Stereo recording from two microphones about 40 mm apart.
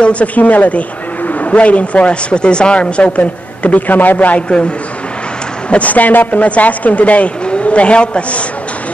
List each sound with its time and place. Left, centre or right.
0.0 s speech: left
5.7 s speech: left